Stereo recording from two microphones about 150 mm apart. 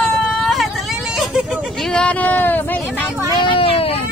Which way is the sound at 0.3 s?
Centre (ahead or behind).